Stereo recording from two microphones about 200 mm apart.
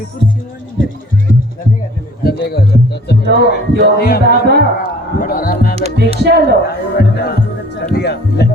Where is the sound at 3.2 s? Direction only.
55° right (ahead or behind).